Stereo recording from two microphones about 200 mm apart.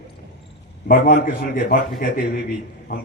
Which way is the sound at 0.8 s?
45° left (ahead or behind).